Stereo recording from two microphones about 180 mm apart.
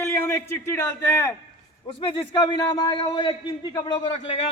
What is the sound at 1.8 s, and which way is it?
A man's voice, 30° left (ahead or behind).